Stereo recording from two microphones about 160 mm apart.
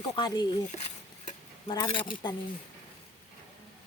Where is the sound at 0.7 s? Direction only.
45° left (ahead or behind).